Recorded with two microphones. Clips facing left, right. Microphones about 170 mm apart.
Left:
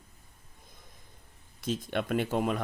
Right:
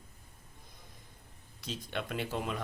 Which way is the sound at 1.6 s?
50° left (ahead or behind).